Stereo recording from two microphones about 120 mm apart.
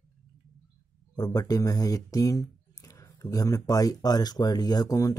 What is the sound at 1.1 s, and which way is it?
Speech, 30° left (ahead or behind).